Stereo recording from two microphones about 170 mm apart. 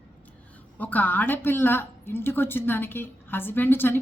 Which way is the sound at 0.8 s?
10° left (ahead or behind).